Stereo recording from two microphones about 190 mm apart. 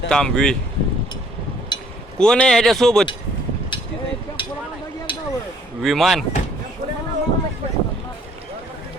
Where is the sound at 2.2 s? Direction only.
5° left (ahead or behind).